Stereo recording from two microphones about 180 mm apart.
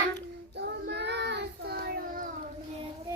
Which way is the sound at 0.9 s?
70° right (ahead or behind).